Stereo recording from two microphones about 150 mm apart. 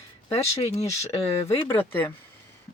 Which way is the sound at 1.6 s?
15° left (ahead or behind).